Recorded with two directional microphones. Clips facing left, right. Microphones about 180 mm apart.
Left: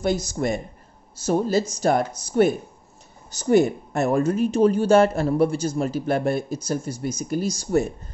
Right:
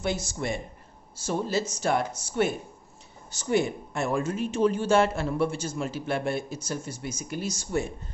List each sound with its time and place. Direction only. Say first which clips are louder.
0.0 s speech: left 7 dB; 40° left (ahead or behind)